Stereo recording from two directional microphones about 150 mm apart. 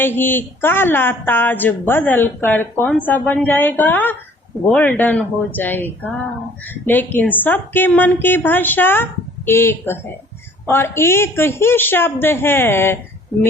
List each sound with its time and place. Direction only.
0.2 s a woman's voice: 15° left (ahead or behind)